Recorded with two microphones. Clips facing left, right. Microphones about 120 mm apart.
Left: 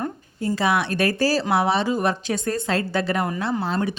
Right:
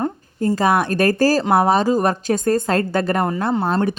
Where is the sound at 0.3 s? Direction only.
45° right (ahead or behind).